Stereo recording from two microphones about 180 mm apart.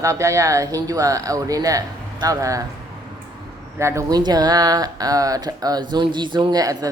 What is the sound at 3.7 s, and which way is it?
Speech, 15° right (ahead or behind).